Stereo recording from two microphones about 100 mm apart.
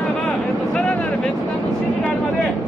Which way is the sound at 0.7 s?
10° left (ahead or behind).